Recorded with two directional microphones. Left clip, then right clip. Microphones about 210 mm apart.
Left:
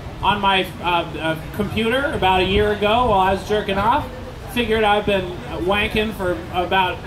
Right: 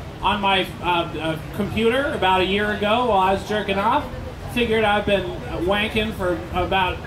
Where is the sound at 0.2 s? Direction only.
20° left (ahead or behind).